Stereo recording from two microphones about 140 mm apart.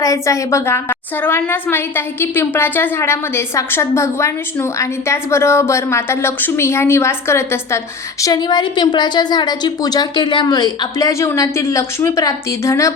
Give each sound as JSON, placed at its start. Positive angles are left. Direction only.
{"t": 0.0, "sound": "a woman's voice", "side_deg": 25}
{"t": 8.2, "sound": "a woman's voice", "side_deg": 30}